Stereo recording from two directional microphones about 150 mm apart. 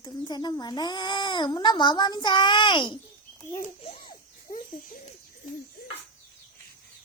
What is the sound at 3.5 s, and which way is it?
Babbling, 40° left (ahead or behind).